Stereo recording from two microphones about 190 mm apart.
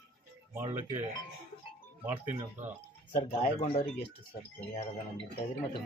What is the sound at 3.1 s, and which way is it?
Speech, 45° left (ahead or behind).